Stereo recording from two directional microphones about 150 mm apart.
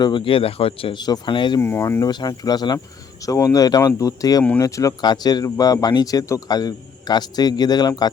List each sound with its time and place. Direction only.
0.0 s speech: 35° left (ahead or behind)
1.6 s speech: 15° left (ahead or behind)